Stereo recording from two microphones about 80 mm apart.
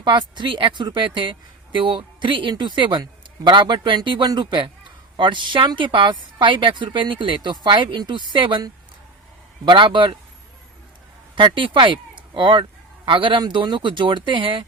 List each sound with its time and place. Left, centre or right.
0.0 s a woman's voice: right
9.6 s a woman's voice: right
11.3 s a woman's voice: right